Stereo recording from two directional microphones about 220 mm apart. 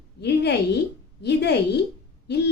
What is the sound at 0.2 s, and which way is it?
A woman's voice, 50° left (ahead or behind).